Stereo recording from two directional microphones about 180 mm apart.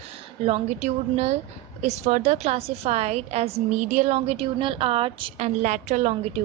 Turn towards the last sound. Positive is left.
turn(degrees=-35)  # may be behind; listen again after turning